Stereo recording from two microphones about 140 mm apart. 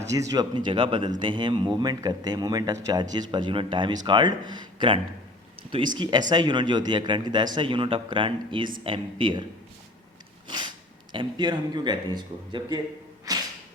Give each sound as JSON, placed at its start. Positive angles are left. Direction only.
{"t": 0.1, "sound": "speech", "side_deg": -25}
{"t": 11.1, "sound": "speech", "side_deg": -35}
{"t": 13.3, "sound": "a sound", "side_deg": -25}